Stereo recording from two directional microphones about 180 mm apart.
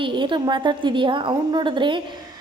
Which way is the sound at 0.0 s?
25° right (ahead or behind).